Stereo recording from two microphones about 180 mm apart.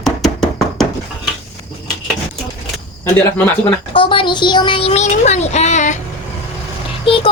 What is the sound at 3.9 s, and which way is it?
Speech, 30° left (ahead or behind).